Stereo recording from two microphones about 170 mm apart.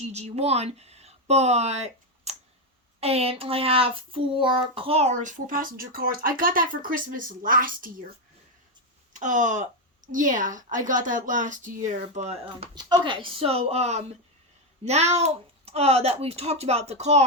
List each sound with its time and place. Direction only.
0.1 s a child's voice: 40° right (ahead or behind); by 7.9 s 55° right (ahead or behind)
9.1 s a child's voice: 50° right (ahead or behind)
12.7 s a child's voice: 25° right (ahead or behind); by 17.2 s 40° right (ahead or behind)